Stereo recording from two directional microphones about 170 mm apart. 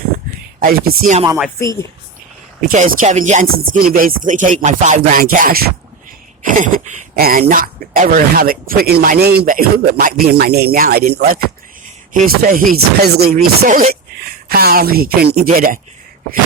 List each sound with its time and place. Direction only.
0.6 s speech: 55° right (ahead or behind)
1.5 s a woman's voice: 15° left (ahead or behind)
2.6 s chopping: 50° right (ahead or behind)
6.4 s speech: 50° right (ahead or behind)